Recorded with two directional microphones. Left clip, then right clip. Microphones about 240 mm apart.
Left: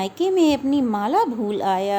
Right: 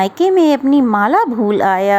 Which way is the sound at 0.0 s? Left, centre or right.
Centre.